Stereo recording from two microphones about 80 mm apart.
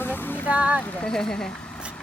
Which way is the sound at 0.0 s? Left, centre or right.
Left.